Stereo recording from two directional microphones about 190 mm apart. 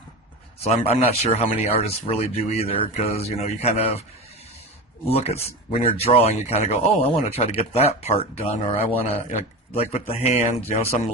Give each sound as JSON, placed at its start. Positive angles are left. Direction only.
{"t": 0.6, "sound": "speech", "side_deg": 30}
{"t": 5.0, "sound": "speech", "side_deg": 30}